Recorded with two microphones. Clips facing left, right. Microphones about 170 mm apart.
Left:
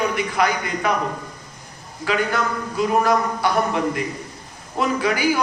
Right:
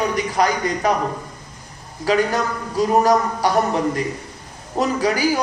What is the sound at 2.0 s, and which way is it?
A man's voice, 35° right (ahead or behind).